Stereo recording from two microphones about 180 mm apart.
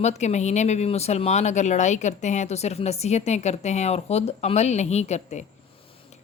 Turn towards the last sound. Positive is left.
turn(degrees=40)  # may be behind; listen again after turning